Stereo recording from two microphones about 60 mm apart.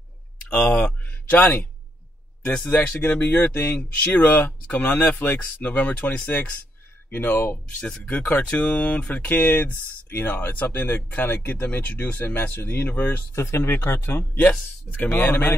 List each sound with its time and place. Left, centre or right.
0.5 s speech: centre
0.7 s a sound: left
2.4 s speech: left
12.9 s speech: left
13.3 s speech: left
15.0 s speech: left